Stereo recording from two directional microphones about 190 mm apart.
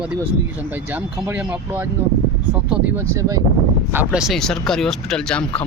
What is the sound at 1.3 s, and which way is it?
Speech, 10° right (ahead or behind).